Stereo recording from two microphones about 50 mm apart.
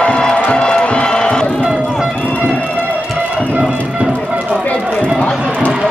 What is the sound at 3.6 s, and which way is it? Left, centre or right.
Music, centre.